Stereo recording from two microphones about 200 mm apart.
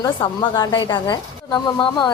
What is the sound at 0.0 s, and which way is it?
A woman's voice, 20° left (ahead or behind).